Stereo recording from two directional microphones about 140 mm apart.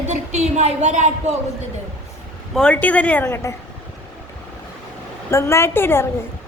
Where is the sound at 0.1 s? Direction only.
55° right (ahead or behind).